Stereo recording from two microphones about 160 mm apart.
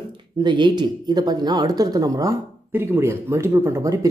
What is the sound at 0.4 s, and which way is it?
Speech, 30° right (ahead or behind).